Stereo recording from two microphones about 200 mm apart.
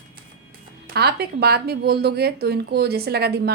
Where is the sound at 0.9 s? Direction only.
55° right (ahead or behind).